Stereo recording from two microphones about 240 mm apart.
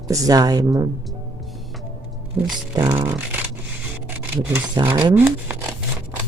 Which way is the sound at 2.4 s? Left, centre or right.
Centre.